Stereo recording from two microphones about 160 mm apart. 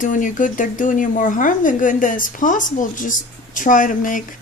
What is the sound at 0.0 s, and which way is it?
Speech, 55° left (ahead or behind).